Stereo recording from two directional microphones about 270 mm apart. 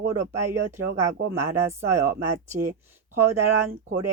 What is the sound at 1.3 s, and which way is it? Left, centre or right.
Speech, centre.